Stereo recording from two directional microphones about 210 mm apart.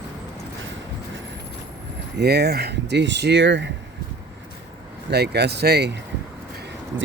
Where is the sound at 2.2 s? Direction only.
50° right (ahead or behind).